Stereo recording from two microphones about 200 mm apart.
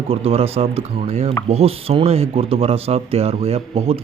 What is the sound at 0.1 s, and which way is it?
Speech, 30° right (ahead or behind).